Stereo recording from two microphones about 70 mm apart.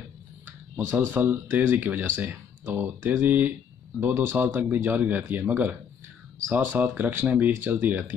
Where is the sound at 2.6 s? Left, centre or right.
Right.